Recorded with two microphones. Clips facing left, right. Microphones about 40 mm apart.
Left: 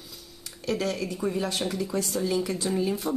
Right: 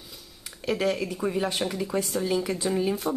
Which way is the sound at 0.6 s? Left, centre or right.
Centre.